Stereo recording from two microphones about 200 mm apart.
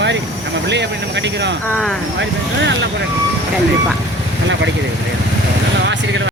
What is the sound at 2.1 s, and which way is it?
Speech, 65° right (ahead or behind).